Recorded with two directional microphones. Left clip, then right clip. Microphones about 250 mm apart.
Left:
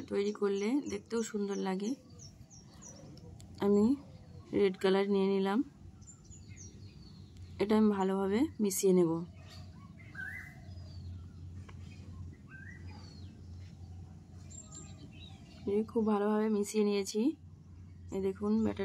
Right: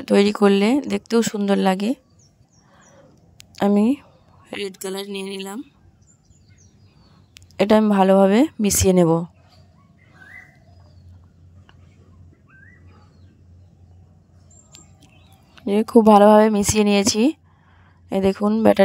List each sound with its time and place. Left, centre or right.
0.0 s speech: right
3.3 s a woman's voice: right
4.6 s speech: centre
7.3 s speech: right
15.6 s speech: right